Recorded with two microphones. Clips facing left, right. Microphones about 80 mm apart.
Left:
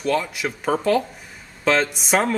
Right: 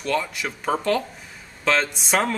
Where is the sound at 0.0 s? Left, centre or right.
Centre.